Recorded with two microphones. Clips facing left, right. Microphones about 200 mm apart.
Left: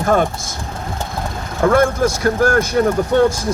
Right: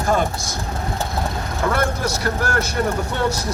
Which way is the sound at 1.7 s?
45° left (ahead or behind).